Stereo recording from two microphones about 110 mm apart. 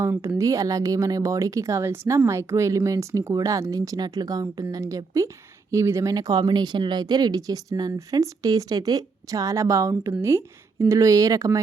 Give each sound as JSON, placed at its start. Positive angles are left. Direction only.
{"t": 0.0, "sound": "speech", "side_deg": -25}